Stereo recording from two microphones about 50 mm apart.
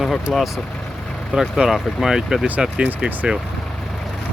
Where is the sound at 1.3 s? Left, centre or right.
Centre.